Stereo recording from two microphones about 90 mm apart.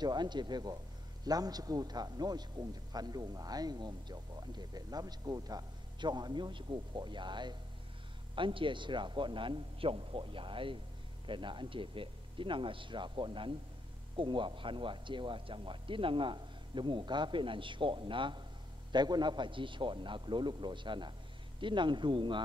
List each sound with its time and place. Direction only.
0.0 s a man's voice: 55° right (ahead or behind)
8.4 s speech: 70° right (ahead or behind)
18.9 s a man's voice: 55° right (ahead or behind)